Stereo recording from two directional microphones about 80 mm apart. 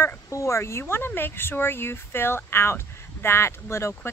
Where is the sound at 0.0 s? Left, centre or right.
Left.